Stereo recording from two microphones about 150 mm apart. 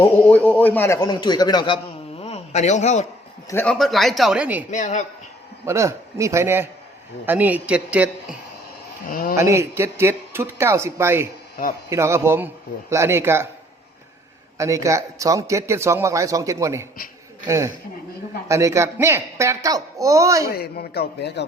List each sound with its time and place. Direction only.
0.0 s a man's voice: 10° left (ahead or behind); by 3.1 s 50° left (ahead or behind)
3.4 s a man's voice: 15° left (ahead or behind)
3.7 s speech: centre (ahead or behind)
4.7 s speech: 55° left (ahead or behind)
5.6 s speech: 20° right (ahead or behind)
9.0 s a man's voice: 75° left (ahead or behind)
9.3 s speech: 20° right (ahead or behind)
14.6 s a man's voice: 20° right (ahead or behind)
20.5 s a man's voice: 90° left